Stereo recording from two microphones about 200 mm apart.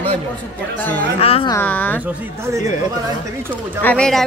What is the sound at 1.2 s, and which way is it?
Speech, 30° left (ahead or behind).